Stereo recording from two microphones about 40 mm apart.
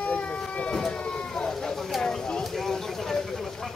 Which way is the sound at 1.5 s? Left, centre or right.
Centre.